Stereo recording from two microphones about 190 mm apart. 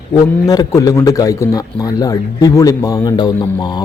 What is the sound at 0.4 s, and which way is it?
Speech, 20° left (ahead or behind).